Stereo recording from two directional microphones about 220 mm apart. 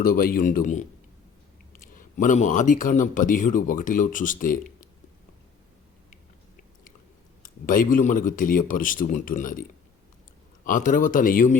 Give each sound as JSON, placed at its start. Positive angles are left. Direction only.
{"t": 0.0, "sound": "speech", "side_deg": 40}
{"t": 2.0, "sound": "speech", "side_deg": 35}
{"t": 7.4, "sound": "speech", "side_deg": 40}
{"t": 10.7, "sound": "speech", "side_deg": 35}